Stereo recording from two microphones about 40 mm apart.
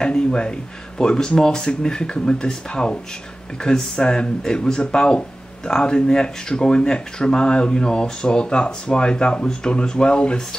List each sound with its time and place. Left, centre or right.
0.0 s speech: left